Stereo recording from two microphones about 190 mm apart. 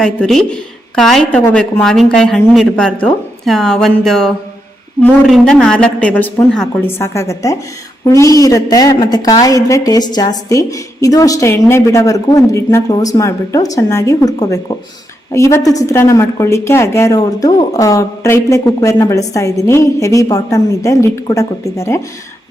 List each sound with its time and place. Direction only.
0.0 s a woman's voice: 5° left (ahead or behind)